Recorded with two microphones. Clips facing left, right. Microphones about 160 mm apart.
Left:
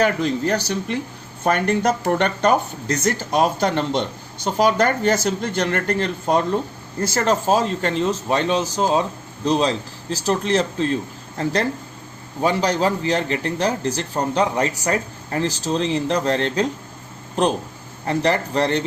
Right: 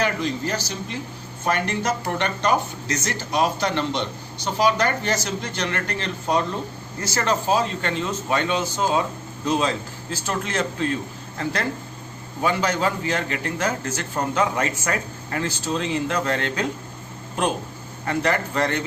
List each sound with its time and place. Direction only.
0.0 s a man's voice: 60° left (ahead or behind); by 10.8 s 35° left (ahead or behind)
12.4 s a man's voice: 35° left (ahead or behind)
18.0 s a man's voice: 30° left (ahead or behind)